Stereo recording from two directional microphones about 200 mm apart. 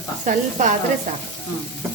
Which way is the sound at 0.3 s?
40° right (ahead or behind).